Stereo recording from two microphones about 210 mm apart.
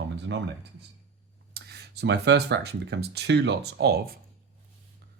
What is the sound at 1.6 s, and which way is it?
Speech, 50° right (ahead or behind).